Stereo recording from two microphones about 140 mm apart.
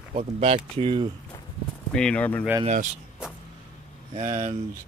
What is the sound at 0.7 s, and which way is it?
Speech, 40° right (ahead or behind).